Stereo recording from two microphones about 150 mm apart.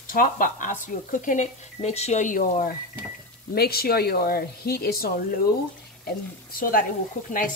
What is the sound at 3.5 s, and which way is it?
Speech, 90° left.